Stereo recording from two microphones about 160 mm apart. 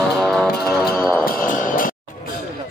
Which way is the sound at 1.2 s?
65° left (ahead or behind).